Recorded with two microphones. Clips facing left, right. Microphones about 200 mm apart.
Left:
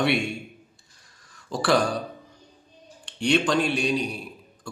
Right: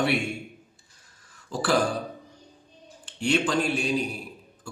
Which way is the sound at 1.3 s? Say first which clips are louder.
Left 3 dB; 5° right (ahead or behind).